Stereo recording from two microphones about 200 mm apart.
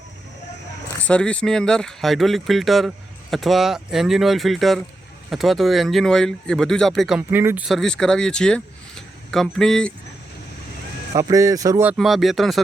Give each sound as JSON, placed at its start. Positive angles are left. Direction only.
{"t": 1.0, "sound": "speech", "side_deg": 5}
{"t": 11.1, "sound": "speech", "side_deg": -15}
{"t": 11.9, "sound": "speech", "side_deg": 0}